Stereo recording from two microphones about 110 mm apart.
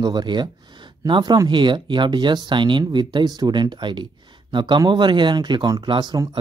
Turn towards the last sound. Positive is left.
turn(degrees=-40)  # may be behind; listen again after turning